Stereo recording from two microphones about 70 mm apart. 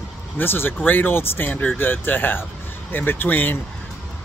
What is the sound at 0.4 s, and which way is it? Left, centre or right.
Speech, left.